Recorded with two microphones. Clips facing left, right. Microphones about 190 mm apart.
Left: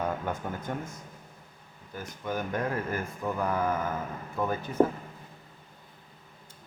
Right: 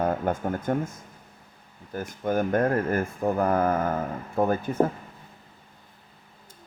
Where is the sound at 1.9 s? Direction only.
50° right (ahead or behind).